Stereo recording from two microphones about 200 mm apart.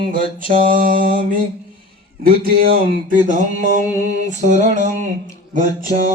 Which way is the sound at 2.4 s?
50° right (ahead or behind).